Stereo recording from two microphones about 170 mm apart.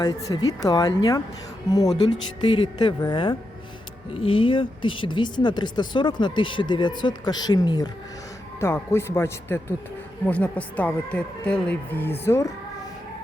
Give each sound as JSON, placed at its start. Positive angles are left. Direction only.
{"t": 0.0, "sound": "speech", "side_deg": 25}